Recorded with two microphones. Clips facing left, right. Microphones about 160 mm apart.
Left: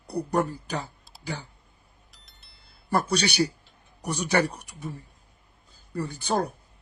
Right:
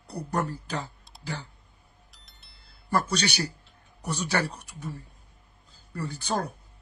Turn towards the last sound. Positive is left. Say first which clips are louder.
# left 3 dB
turn(degrees=15)  # may be behind; listen again after turning